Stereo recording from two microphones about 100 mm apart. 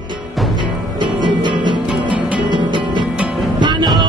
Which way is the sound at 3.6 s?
50° right (ahead or behind).